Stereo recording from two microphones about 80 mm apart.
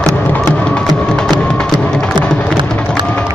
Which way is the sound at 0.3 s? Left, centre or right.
Centre.